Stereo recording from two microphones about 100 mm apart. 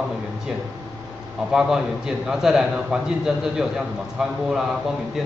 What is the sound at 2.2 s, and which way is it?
Speech, 5° right (ahead or behind).